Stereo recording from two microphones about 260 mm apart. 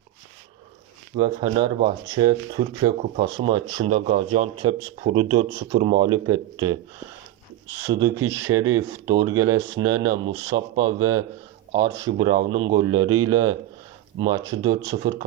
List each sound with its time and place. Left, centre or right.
1.2 s speech: centre
7.8 s speech: centre